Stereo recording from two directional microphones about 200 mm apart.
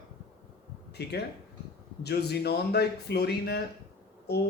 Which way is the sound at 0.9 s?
55° left (ahead or behind).